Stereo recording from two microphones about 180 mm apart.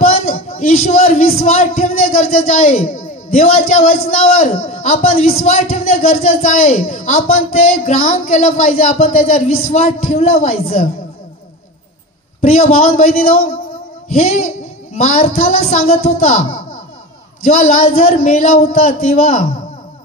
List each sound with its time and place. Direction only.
0.1 s a sound: 35° left (ahead or behind)
1.4 s a man's voice: 40° left (ahead or behind)
12.4 s a man's voice: 40° left (ahead or behind)